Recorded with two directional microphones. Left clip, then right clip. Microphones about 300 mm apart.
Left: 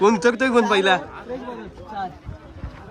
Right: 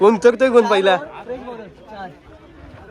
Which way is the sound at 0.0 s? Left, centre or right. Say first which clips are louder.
Right 5 dB; centre.